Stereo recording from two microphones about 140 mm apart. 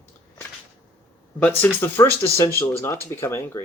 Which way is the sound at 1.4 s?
15° left (ahead or behind).